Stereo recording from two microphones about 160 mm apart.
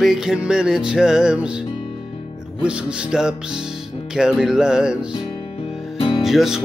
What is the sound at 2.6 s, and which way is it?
Music, 5° right (ahead or behind).